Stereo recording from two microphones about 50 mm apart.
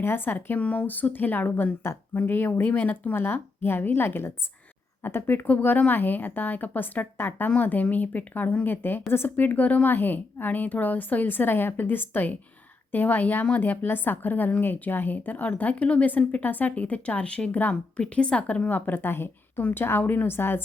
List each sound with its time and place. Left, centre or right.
0.0 s speech: left
0.6 s a woman's voice: left
5.5 s a woman's voice: left
18.9 s a woman's voice: left
20.0 s a woman's voice: left
20.2 s speech: left